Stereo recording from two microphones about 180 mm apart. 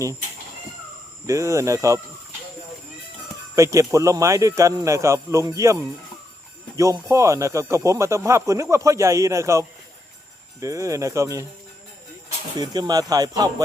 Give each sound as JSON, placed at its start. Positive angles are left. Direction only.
{"t": 1.3, "sound": "speech", "side_deg": -15}
{"t": 3.5, "sound": "speech", "side_deg": -15}
{"t": 6.7, "sound": "speech", "side_deg": -15}
{"t": 12.5, "sound": "speech", "side_deg": -25}